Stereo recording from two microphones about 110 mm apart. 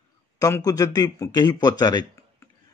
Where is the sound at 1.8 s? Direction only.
35° left (ahead or behind).